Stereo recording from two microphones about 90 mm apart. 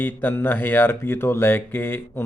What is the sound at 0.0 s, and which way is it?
Speech, 20° left (ahead or behind).